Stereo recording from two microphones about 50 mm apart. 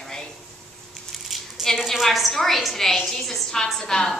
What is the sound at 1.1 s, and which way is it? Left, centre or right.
A woman's voice, centre.